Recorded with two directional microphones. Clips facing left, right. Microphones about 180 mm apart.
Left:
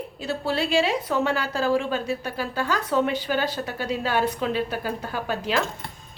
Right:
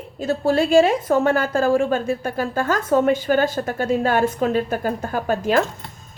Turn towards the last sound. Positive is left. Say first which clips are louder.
# right 6 dB
turn(degrees=-45)  # may be behind; listen again after turning